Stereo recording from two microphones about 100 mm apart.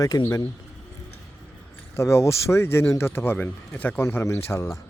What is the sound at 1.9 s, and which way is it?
Speech, 25° left (ahead or behind).